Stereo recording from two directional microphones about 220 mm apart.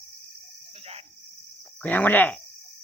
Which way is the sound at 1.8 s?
5° left (ahead or behind).